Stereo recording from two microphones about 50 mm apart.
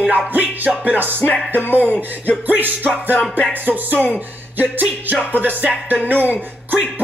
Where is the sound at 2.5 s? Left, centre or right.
Right.